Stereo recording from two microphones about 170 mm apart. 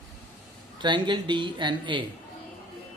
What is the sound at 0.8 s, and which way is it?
Speech, 25° right (ahead or behind).